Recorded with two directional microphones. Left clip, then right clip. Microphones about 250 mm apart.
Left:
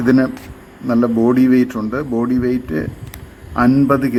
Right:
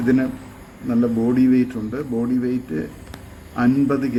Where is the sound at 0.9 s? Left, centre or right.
Centre.